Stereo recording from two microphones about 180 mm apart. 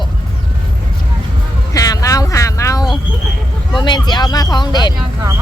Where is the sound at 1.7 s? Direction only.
20° left (ahead or behind).